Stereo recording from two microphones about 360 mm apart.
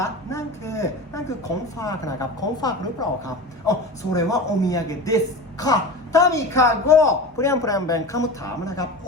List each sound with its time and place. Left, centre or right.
0.0 s a woman's voice: centre